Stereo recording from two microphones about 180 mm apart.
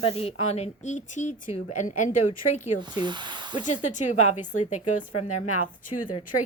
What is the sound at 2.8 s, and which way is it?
Speech, 25° right (ahead or behind).